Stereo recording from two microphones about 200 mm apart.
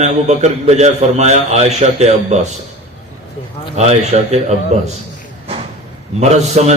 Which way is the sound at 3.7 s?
35° right (ahead or behind).